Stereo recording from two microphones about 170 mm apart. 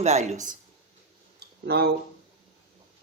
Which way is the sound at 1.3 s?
75° right (ahead or behind).